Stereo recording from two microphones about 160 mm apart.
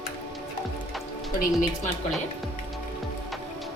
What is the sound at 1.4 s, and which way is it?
Speech, 55° left (ahead or behind).